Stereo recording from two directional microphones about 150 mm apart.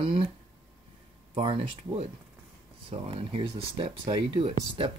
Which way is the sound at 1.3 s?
35° right (ahead or behind).